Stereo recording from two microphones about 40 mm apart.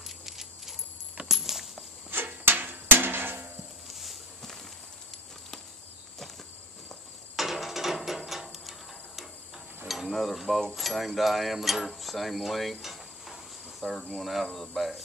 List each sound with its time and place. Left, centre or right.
0.0 s horse: centre
1.3 s coin: centre
2.0 s a sound: right
3.8 s a sound: centre
7.3 s ratchet: centre
8.3 s a sound: centre
9.8 s stir: centre
10.7 s mechanisms: centre
14.2 s speech: centre
14.5 s speech: centre